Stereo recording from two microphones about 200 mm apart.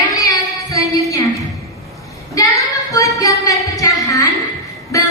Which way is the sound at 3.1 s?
15° left (ahead or behind).